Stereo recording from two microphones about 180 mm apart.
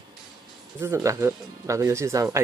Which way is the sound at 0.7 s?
15° right (ahead or behind).